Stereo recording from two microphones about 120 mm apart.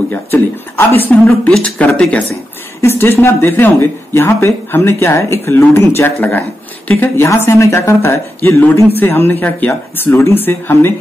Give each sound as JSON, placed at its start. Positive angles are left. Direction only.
{"t": 0.1, "sound": "speech", "side_deg": 20}
{"t": 1.5, "sound": "speech", "side_deg": 5}
{"t": 2.8, "sound": "speech", "side_deg": 20}